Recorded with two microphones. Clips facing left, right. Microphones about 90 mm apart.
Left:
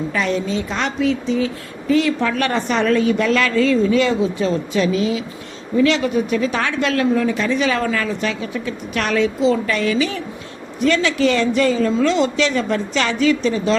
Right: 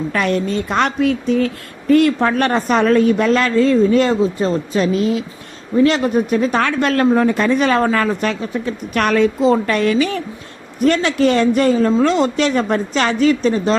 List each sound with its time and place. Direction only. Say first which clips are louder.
0.1 s speech: right 3 dB; 55° right (ahead or behind)